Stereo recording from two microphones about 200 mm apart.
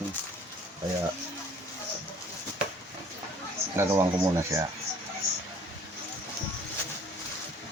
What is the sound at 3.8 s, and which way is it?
Speech, 15° right (ahead or behind).